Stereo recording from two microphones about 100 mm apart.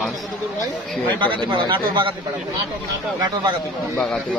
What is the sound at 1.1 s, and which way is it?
A man's voice, 55° right (ahead or behind).